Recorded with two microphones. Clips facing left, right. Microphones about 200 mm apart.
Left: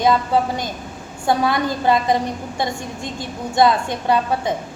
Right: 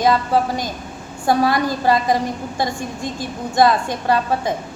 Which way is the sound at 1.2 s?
20° left (ahead or behind).